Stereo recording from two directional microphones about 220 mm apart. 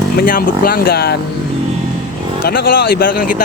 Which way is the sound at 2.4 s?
45° left (ahead or behind).